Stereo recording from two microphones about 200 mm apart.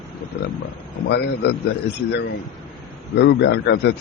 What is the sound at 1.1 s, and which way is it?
A man's voice, 60° left (ahead or behind).